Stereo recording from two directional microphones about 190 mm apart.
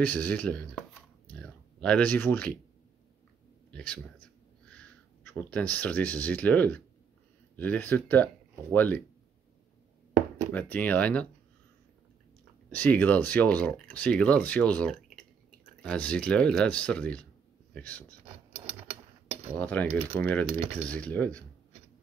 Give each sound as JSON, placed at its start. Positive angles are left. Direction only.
{"t": 0.0, "sound": "speech", "side_deg": 10}
{"t": 1.3, "sound": "a sound", "side_deg": 5}
{"t": 3.7, "sound": "speech", "side_deg": 5}
{"t": 10.5, "sound": "speech", "side_deg": 10}
{"t": 12.7, "sound": "speech", "side_deg": 10}
{"t": 18.5, "sound": "a sound", "side_deg": -35}
{"t": 19.6, "sound": "speech", "side_deg": 10}